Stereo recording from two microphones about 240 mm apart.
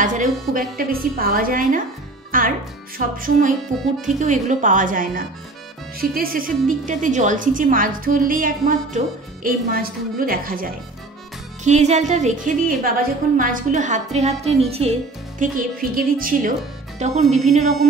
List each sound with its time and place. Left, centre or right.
0.0 s a woman's voice: right